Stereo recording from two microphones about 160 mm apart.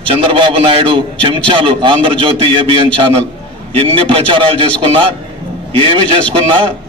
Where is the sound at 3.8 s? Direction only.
30° right (ahead or behind).